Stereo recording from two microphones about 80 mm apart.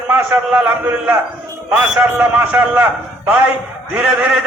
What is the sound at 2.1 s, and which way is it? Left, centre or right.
Speech, centre.